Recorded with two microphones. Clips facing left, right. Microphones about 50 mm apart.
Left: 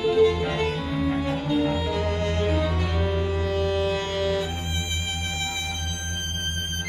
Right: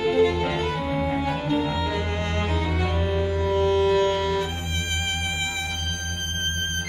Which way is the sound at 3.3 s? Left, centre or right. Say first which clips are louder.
Right 3 dB; right.